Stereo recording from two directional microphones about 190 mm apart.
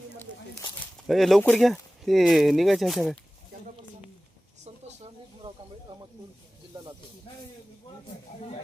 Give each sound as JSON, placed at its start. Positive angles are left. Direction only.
{"t": 1.0, "sound": "speech", "side_deg": 0}
{"t": 5.4, "sound": "snake", "side_deg": -30}